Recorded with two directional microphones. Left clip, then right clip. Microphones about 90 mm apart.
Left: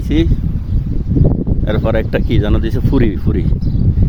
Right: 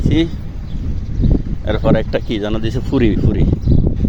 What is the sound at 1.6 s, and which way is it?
Speech, 75° left (ahead or behind).